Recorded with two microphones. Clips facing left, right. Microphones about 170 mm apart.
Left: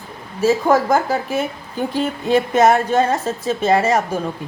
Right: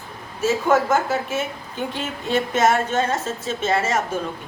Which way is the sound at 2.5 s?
35° left (ahead or behind).